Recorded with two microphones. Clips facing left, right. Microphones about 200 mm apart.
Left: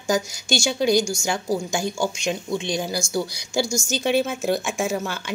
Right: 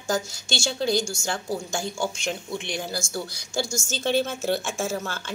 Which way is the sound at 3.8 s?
15° left (ahead or behind).